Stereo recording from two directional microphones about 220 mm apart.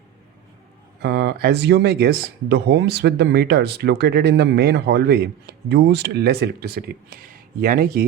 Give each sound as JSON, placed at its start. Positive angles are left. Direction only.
{"t": 1.0, "sound": "speech", "side_deg": -45}